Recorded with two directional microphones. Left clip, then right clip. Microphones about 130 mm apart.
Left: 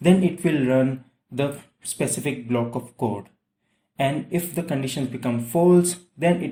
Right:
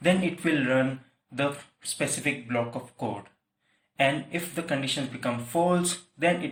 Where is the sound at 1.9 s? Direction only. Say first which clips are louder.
Left 2 dB; 40° left (ahead or behind).